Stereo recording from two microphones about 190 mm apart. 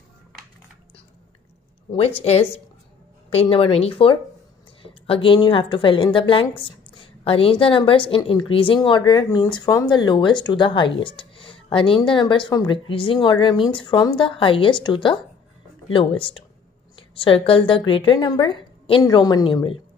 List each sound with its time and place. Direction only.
1.9 s a woman's voice: 30° left (ahead or behind)